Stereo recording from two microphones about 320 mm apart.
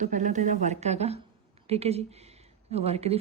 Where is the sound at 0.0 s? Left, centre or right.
Right.